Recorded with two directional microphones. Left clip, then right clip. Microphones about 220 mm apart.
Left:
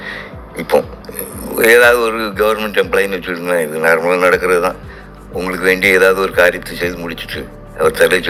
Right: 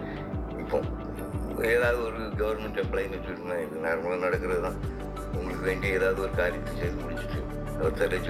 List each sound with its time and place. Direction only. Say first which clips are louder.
0.0 s music: left 10 dB; 35° left (ahead or behind)
1.5 s speech: left 17 dB; 40° left (ahead or behind)